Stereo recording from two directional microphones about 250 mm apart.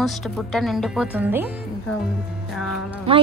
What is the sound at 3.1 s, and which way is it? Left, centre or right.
Speech, right.